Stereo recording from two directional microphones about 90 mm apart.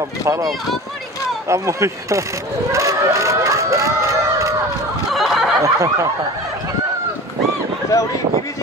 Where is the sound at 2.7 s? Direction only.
35° right (ahead or behind).